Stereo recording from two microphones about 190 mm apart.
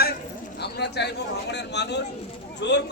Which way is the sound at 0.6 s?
60° left (ahead or behind).